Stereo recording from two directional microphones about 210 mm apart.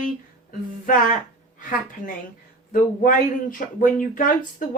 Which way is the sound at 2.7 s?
40° left (ahead or behind).